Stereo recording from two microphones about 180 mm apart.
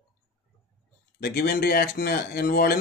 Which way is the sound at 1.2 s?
55° left (ahead or behind).